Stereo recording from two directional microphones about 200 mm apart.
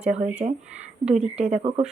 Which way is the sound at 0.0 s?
35° right (ahead or behind).